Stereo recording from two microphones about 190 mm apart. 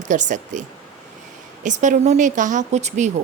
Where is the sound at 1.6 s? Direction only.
40° right (ahead or behind).